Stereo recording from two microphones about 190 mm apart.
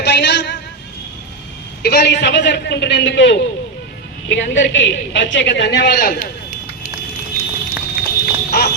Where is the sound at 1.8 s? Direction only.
55° left (ahead or behind).